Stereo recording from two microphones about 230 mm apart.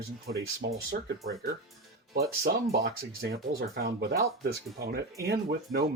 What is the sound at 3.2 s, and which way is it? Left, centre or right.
Speech, right.